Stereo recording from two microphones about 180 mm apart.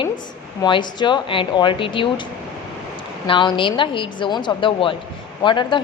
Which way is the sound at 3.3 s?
25° left (ahead or behind).